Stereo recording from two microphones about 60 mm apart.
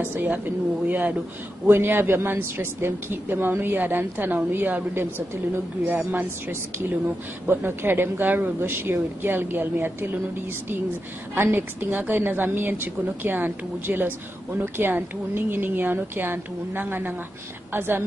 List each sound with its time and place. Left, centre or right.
0.0 s a woman's voice: right
1.7 s a woman's voice: right
7.4 s a woman's voice: right
11.3 s a woman's voice: right